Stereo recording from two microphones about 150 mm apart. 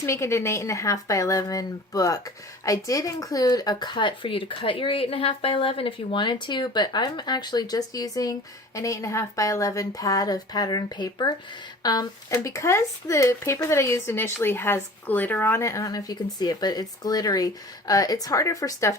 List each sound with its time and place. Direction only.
0.0 s speech: 20° left (ahead or behind)